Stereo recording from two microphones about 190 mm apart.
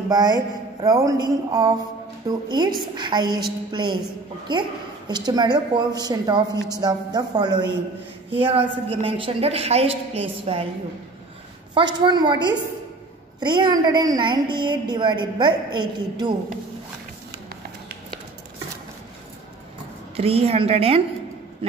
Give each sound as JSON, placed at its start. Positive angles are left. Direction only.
{"t": 0.1, "sound": "a woman's voice", "side_deg": -20}
{"t": 11.7, "sound": "a woman's voice", "side_deg": -25}
{"t": 20.2, "sound": "a woman's voice", "side_deg": -30}